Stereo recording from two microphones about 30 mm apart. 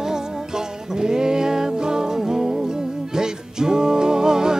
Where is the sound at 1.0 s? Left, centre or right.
Right.